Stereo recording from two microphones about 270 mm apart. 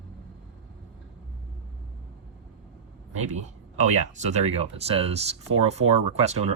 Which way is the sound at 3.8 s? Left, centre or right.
Right.